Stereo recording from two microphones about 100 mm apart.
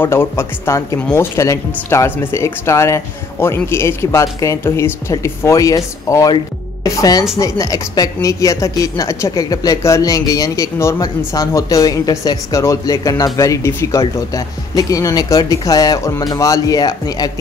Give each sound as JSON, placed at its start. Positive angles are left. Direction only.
{"t": 0.0, "sound": "a woman's voice", "side_deg": 25}